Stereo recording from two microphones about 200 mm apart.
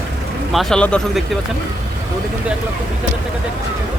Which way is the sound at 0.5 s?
5° left (ahead or behind).